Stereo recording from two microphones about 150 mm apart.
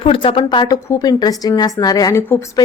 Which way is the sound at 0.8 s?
20° left (ahead or behind).